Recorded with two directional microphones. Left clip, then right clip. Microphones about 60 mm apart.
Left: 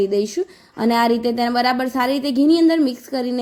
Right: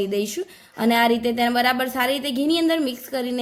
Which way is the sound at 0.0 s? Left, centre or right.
Left.